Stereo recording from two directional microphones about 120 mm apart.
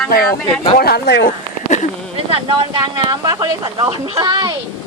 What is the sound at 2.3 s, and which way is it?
Speech, 45° right (ahead or behind).